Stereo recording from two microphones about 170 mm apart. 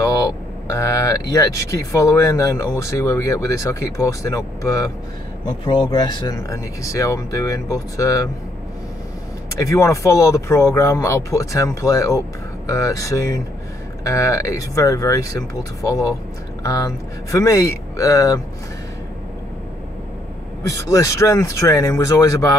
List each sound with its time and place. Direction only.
0.0 s speech: 20° left (ahead or behind)
9.6 s speech: 20° left (ahead or behind)
20.8 s speech: 20° left (ahead or behind)